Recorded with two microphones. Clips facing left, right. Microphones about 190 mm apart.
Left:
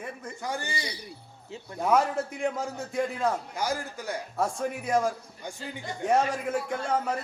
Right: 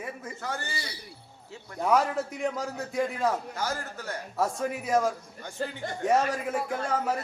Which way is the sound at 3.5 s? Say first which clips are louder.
Left 2 dB; 15° left (ahead or behind).